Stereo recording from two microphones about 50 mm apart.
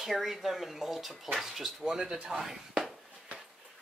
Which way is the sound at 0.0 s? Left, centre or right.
Centre.